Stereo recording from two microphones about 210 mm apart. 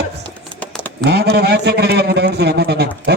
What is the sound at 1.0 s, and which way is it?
A man's voice, 50° right (ahead or behind).